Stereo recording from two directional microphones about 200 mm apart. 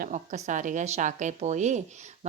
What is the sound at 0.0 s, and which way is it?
A woman's voice, 40° right (ahead or behind).